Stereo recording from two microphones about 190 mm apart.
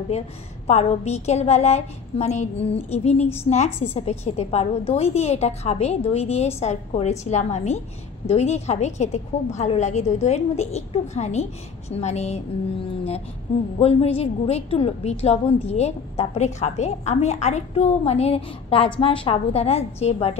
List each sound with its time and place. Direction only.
0.7 s a woman's voice: 35° left (ahead or behind)